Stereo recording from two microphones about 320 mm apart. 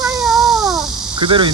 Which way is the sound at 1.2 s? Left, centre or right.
Centre.